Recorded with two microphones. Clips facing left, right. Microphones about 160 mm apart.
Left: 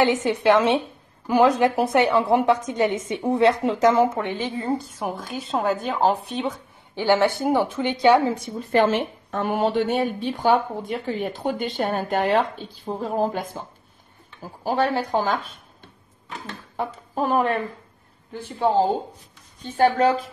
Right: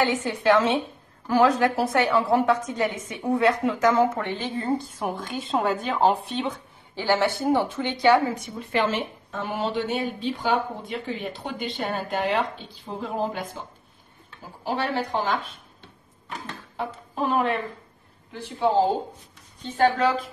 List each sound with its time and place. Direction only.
0.0 s a woman's voice: 20° left (ahead or behind)
4.6 s a woman's voice: centre (ahead or behind)
7.0 s a woman's voice: 15° left (ahead or behind)
8.5 s a woman's voice: 45° left (ahead or behind)
14.6 s a woman's voice: 45° left (ahead or behind)
16.7 s speech: 45° left (ahead or behind)